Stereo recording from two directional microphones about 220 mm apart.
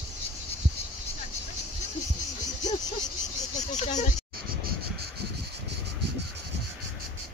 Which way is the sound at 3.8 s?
30° left (ahead or behind).